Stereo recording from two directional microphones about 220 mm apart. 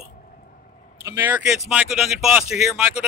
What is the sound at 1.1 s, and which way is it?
Speech, 5° right (ahead or behind).